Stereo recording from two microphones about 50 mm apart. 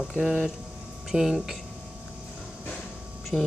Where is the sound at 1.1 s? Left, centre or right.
Centre.